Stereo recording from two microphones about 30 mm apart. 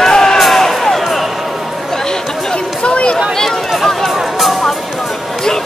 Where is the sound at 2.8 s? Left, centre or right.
Left.